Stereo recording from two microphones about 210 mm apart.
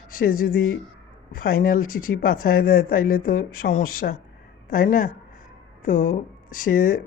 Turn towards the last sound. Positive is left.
turn(degrees=40)  # may be behind; listen again after turning